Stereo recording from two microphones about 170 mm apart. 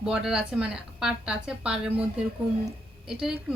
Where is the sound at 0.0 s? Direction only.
5° right (ahead or behind).